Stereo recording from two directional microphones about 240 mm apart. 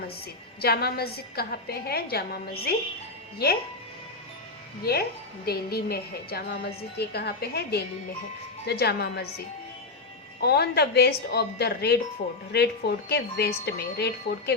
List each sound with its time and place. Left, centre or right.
0.6 s a woman's voice: left
4.9 s a woman's voice: left
10.4 s a woman's voice: left